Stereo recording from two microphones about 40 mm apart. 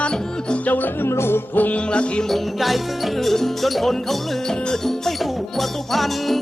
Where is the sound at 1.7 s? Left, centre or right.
Left.